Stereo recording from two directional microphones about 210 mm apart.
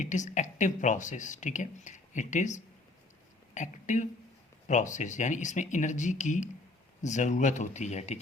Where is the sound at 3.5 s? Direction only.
35° left (ahead or behind).